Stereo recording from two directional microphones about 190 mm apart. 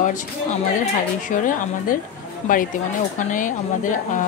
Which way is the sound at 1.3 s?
45° left (ahead or behind).